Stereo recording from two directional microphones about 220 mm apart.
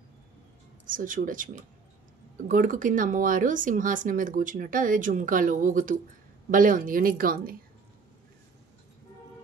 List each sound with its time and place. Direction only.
0.8 s speech: 35° right (ahead or behind)